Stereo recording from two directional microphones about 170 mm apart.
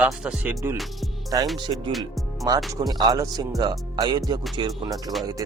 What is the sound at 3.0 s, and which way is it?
Speech, 25° right (ahead or behind).